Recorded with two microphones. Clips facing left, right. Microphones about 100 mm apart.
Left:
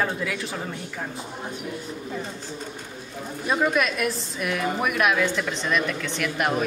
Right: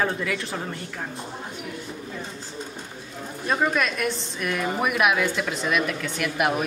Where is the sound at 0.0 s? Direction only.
5° left (ahead or behind).